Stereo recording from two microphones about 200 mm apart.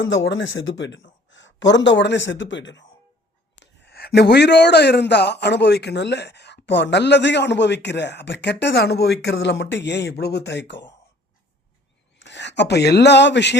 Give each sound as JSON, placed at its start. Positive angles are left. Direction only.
{"t": 0.0, "sound": "a man's voice", "side_deg": 70}
{"t": 12.1, "sound": "speech", "side_deg": 60}